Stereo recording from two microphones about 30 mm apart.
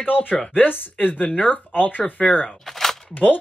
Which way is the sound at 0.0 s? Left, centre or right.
Left.